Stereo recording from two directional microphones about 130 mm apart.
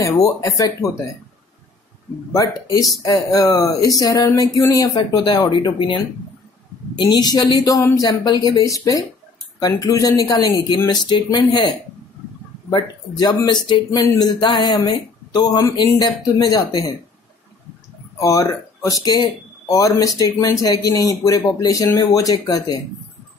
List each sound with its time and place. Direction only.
0.2 s speech: 25° left (ahead or behind)
2.3 s speech: 25° left (ahead or behind)
7.0 s speech: 35° left (ahead or behind)
18.1 s speech: 25° left (ahead or behind)